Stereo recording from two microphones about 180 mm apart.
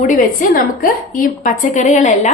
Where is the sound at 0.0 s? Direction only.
50° left (ahead or behind).